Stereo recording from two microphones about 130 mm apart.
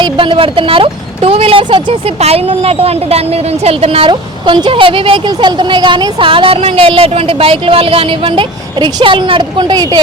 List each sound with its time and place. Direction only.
0.0 s speech: 40° right (ahead or behind)